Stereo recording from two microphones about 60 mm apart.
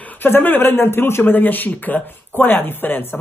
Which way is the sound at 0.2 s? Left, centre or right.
Left.